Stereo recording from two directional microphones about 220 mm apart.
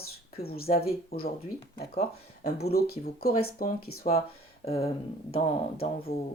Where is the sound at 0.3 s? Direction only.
45° left (ahead or behind).